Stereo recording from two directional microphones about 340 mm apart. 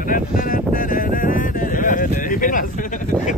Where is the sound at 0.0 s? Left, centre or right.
Left.